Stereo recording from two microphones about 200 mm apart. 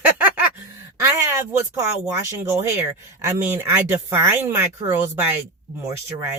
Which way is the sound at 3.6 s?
10° right (ahead or behind).